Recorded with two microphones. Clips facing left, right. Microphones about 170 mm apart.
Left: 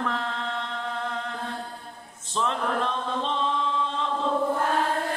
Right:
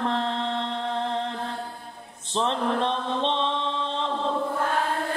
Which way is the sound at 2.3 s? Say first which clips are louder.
Right 2 dB; 30° right (ahead or behind).